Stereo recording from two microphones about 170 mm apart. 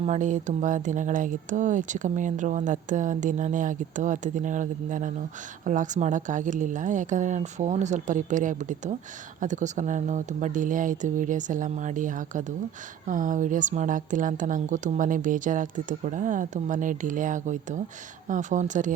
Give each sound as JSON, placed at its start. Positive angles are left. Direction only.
{"t": 0.0, "sound": "speech", "side_deg": -45}